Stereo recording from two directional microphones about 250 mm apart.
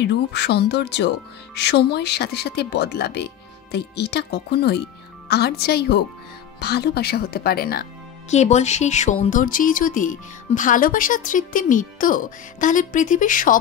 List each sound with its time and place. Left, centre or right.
0.0 s speech: left